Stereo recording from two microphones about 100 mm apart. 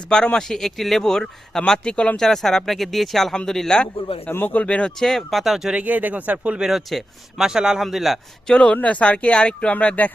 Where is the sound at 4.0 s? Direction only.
70° left (ahead or behind).